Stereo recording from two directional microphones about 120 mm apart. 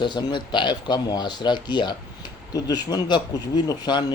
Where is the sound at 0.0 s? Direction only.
40° left (ahead or behind).